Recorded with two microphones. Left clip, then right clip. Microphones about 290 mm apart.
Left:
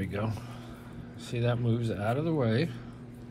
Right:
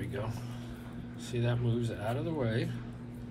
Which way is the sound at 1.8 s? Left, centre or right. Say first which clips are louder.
Left 5 dB; left.